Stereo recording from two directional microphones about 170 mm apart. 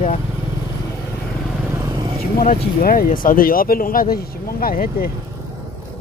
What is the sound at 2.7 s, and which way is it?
Speech, 55° left (ahead or behind).